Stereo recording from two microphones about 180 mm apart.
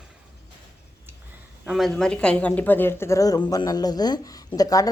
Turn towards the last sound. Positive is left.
turn(degrees=20)  # may be behind; listen again after turning